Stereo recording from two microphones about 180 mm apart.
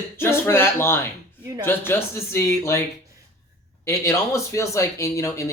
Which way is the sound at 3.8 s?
15° left (ahead or behind).